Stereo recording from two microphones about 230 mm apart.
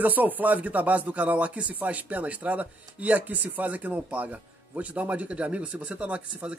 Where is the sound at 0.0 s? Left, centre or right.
Centre.